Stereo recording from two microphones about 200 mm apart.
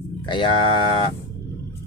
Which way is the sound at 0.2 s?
25° left (ahead or behind).